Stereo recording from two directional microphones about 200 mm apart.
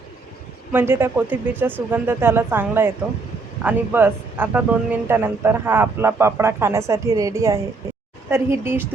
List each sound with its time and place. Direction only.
0.7 s speech: 10° right (ahead or behind)